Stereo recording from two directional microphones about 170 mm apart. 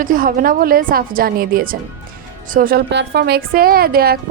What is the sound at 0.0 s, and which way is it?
A woman's voice, 55° right (ahead or behind).